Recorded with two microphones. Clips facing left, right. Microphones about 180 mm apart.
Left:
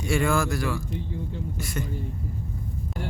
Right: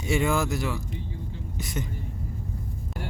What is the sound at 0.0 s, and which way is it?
Speech, 20° right (ahead or behind).